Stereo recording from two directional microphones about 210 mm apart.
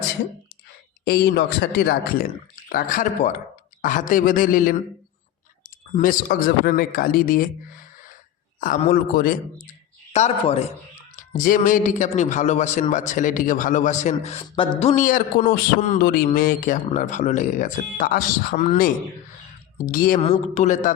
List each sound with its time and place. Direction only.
1.0 s a man's voice: 50° left (ahead or behind)
6.0 s speech: 40° left (ahead or behind)
8.6 s speech: 40° left (ahead or behind)
10.1 s speech: 30° left (ahead or behind)
11.2 s a man's voice: 40° left (ahead or behind)